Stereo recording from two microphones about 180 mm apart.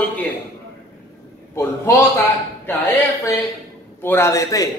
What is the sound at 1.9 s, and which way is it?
Speech, 15° left (ahead or behind).